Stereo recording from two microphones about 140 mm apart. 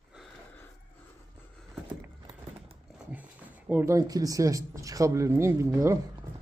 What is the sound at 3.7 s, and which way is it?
Speech, 15° right (ahead or behind).